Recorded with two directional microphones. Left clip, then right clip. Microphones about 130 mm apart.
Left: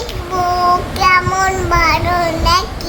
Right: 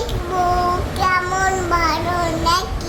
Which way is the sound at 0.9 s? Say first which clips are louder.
Left 3 dB; 20° left (ahead or behind).